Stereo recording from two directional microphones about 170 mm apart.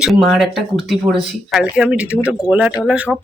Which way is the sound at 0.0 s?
Centre (ahead or behind).